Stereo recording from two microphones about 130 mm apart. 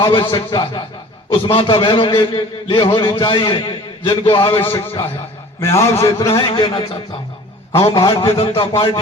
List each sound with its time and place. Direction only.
0.0 s a man's voice: 40° left (ahead or behind)
5.6 s a man's voice: 20° left (ahead or behind)
6.6 s a man's voice: 40° left (ahead or behind)
7.9 s a man's voice: 30° left (ahead or behind)
8.4 s a man's voice: 45° left (ahead or behind)